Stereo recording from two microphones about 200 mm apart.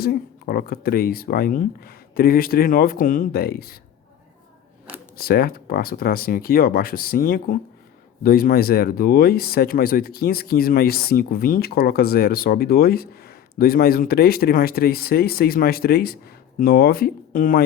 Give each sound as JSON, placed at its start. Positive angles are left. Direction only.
{"t": 0.0, "sound": "speech", "side_deg": 50}
{"t": 5.1, "sound": "speech", "side_deg": 50}